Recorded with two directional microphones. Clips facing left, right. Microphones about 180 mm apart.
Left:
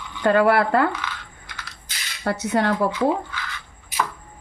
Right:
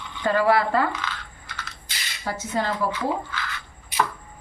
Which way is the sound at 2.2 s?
70° left (ahead or behind).